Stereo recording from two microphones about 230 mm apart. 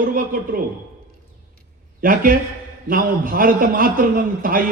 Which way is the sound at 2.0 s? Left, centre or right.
Right.